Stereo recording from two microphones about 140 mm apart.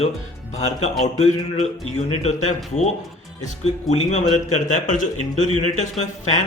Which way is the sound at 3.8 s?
55° left (ahead or behind).